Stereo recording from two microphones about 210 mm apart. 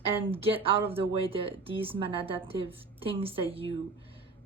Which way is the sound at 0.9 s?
25° right (ahead or behind).